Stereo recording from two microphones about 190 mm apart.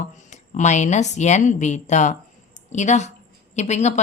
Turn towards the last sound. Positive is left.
turn(degrees=35)  # may be behind; listen again after turning